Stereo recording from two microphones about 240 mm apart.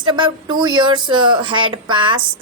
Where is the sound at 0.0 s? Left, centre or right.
Centre.